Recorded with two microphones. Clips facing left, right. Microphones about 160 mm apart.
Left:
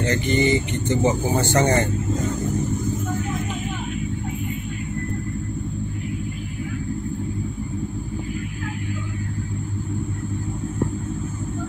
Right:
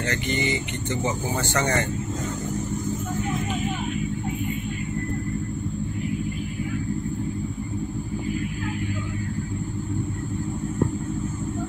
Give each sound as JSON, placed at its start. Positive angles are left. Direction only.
{"t": 0.0, "sound": "speech", "side_deg": 30}